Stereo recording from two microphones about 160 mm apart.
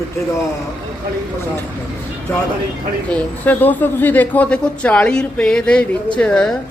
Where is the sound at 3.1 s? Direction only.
10° left (ahead or behind).